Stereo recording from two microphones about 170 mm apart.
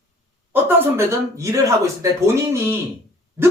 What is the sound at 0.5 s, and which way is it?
Speech, 15° right (ahead or behind).